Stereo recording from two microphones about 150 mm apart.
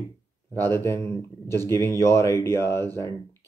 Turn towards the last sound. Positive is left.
turn(degrees=20)  # may be behind; listen again after turning